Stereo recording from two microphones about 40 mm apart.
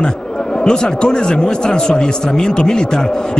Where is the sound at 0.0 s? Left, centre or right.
Centre.